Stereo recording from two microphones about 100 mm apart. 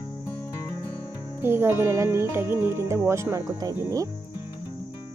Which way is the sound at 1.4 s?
25° right (ahead or behind).